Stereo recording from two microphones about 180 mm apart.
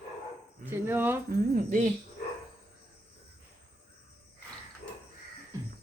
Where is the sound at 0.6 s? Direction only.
10° right (ahead or behind).